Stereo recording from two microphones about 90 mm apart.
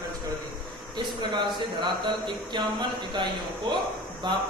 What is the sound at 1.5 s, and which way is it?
Speech, 60° right (ahead or behind).